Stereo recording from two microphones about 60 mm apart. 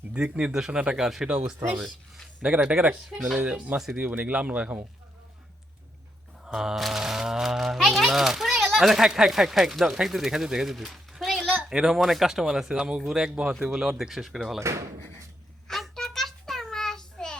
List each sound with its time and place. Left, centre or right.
0.1 s speech: centre
2.4 s speech: centre
6.5 s a child's voice: centre
15.6 s a sound: centre